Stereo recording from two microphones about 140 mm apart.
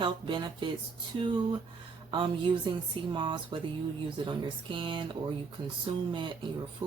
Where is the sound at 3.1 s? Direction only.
35° right (ahead or behind).